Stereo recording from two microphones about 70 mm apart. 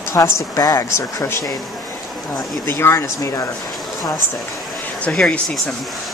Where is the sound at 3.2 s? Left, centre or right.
Left.